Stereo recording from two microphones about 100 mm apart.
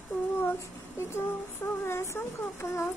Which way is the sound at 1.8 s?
25° left (ahead or behind).